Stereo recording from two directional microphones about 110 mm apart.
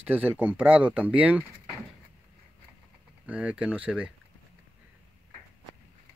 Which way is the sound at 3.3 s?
10° right (ahead or behind).